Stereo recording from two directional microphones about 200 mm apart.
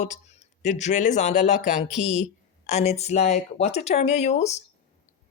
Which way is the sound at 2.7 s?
35° left (ahead or behind).